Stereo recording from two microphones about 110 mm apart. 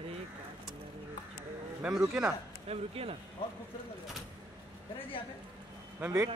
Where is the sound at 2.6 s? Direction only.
60° right (ahead or behind).